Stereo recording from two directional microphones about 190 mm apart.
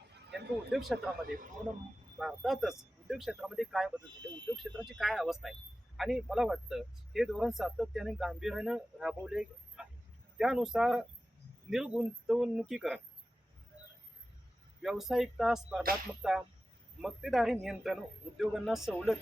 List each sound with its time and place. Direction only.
0.3 s a sound: 65° right (ahead or behind)
0.7 s speech: centre (ahead or behind)
2.1 s speech: centre (ahead or behind)
14.8 s speech: centre (ahead or behind)